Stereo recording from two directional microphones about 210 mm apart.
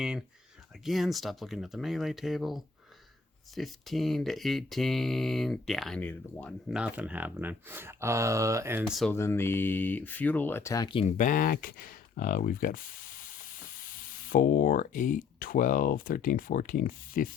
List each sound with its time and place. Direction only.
0.0 s speech: 5° right (ahead or behind)
6.7 s speech: 5° right (ahead or behind)
8.9 s speech: centre (ahead or behind)
9.1 s speech: 10° left (ahead or behind)
11.2 s speech: 40° left (ahead or behind)